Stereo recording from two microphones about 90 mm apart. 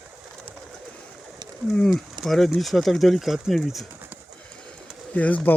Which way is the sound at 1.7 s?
5° left (ahead or behind).